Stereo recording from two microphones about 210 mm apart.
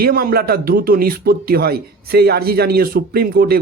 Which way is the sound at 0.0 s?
45° right (ahead or behind).